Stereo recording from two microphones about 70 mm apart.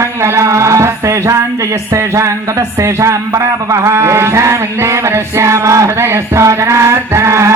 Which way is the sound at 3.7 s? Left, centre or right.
Right.